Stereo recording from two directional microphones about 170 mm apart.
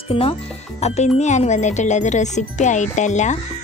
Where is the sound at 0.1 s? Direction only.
35° left (ahead or behind).